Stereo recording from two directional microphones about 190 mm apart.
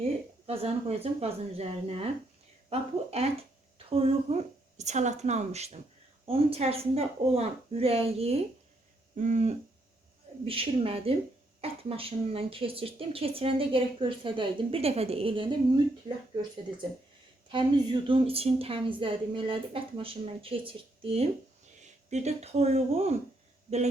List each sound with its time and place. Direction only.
0.4 s a woman's voice: 30° right (ahead or behind)
17.5 s a woman's voice: 25° right (ahead or behind)